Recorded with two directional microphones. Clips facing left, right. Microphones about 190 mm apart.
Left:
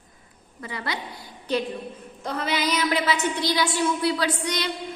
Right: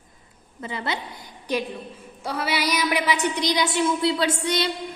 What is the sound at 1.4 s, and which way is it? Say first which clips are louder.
A woman's voice: left 1 dB; 10° right (ahead or behind).